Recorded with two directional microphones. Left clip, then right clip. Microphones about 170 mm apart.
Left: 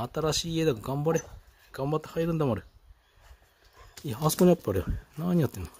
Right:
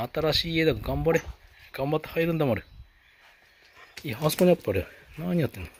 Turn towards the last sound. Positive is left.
turn(degrees=35)  # may be behind; listen again after turning